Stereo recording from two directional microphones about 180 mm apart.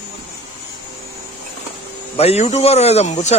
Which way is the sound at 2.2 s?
35° left (ahead or behind).